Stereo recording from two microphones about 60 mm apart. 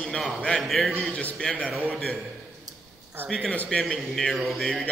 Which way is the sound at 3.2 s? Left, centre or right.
Centre.